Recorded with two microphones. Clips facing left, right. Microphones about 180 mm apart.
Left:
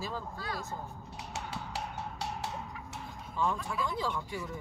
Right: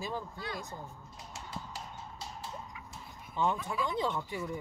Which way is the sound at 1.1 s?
70° left (ahead or behind).